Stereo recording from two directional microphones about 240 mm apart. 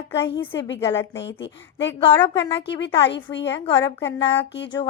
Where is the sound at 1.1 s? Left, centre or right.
Left.